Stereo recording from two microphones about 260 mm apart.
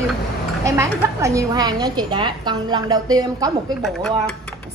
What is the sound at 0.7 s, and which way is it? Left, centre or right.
A woman's voice, centre.